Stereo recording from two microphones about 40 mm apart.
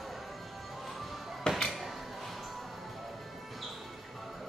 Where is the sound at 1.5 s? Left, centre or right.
Centre.